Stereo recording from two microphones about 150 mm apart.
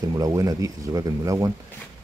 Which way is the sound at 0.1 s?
25° right (ahead or behind).